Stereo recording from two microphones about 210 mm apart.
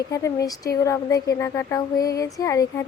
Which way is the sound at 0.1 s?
15° left (ahead or behind).